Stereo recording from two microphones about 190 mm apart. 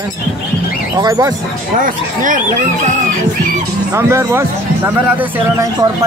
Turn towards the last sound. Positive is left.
turn(degrees=-15)  # may be behind; listen again after turning